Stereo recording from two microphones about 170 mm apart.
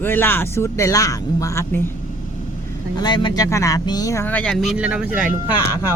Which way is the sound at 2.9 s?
25° left (ahead or behind).